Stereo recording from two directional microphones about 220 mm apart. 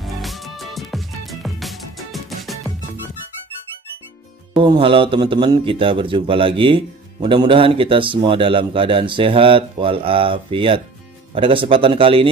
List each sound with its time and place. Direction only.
0.0 s music: centre (ahead or behind)
4.6 s a man's voice: 25° right (ahead or behind)